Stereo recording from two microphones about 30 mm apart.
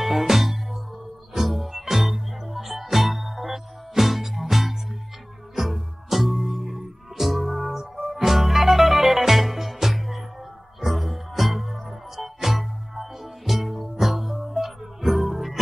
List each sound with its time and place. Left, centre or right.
0.0 s music: centre